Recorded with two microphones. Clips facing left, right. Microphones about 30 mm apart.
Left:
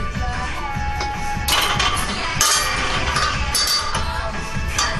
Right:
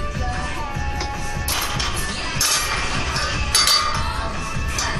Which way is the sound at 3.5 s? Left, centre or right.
Right.